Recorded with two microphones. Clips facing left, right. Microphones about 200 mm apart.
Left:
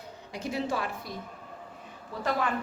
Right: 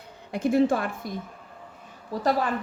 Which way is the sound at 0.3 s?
50° right (ahead or behind).